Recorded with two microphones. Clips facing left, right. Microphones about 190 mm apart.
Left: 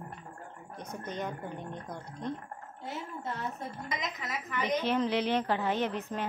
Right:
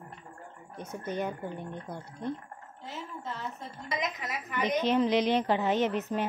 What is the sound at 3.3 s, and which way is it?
Speech, 55° left (ahead or behind).